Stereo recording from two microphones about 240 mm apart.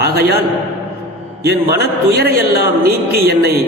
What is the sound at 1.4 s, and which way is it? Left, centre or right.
A man's voice, right.